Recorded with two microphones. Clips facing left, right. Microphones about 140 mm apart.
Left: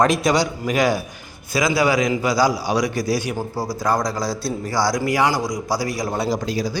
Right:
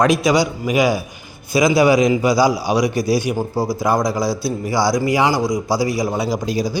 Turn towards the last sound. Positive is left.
turn(degrees=-15)  # may be behind; listen again after turning